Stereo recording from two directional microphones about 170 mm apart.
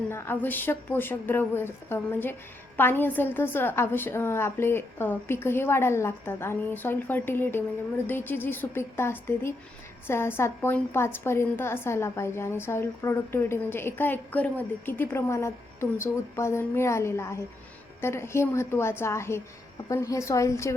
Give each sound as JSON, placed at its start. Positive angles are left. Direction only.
{"t": 0.1, "sound": "a woman's voice", "side_deg": 15}